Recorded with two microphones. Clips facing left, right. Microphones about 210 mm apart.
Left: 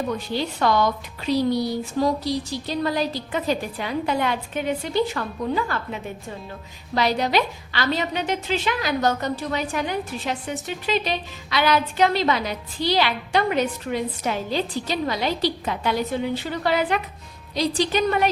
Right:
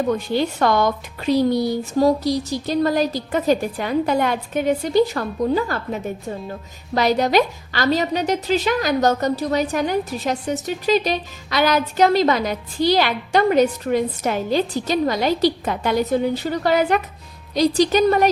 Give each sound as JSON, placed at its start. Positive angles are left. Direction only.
{"t": 0.3, "sound": "a woman's voice", "side_deg": -50}